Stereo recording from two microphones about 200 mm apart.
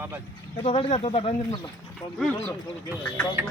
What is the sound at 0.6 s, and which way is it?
Speech, 30° left (ahead or behind).